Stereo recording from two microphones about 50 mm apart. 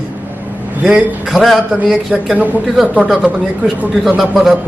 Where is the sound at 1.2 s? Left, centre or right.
Centre.